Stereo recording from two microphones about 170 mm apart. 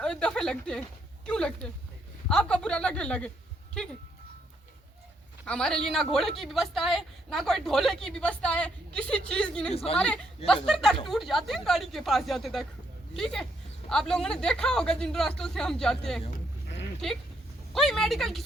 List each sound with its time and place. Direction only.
0.0 s speech: 5° left (ahead or behind)
5.5 s speech: 5° left (ahead or behind)
9.7 s a woman's voice: 35° left (ahead or behind)
10.0 s speech: 5° left (ahead or behind)
17.7 s speech: centre (ahead or behind)